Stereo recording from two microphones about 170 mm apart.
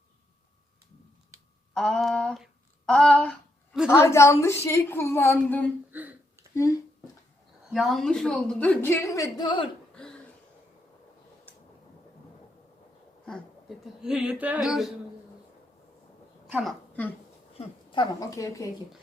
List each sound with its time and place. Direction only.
1.7 s a sound: 5° left (ahead or behind)
3.8 s a woman's voice: 15° left (ahead or behind)
5.9 s a sound: 10° right (ahead or behind)
6.5 s speech: 15° left (ahead or behind)
7.7 s a woman's voice: centre (ahead or behind); by 9.6 s 25° left (ahead or behind)
9.9 s throat clearing: 5° left (ahead or behind)
13.2 s a woman's voice: centre (ahead or behind)
16.5 s speech: 5° right (ahead or behind)
17.6 s a woman's voice: 30° left (ahead or behind)